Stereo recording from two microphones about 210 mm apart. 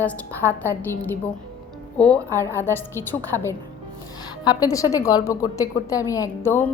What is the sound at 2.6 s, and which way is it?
A woman's voice, 10° left (ahead or behind).